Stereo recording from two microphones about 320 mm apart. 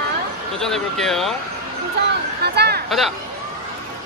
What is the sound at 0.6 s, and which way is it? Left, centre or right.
Speech, centre.